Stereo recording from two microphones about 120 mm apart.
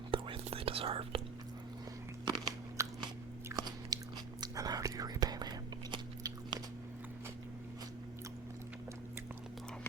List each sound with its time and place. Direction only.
0.1 s whispering: 50° right (ahead or behind)
2.2 s crunch: 35° right (ahead or behind)
3.5 s biting: 35° right (ahead or behind)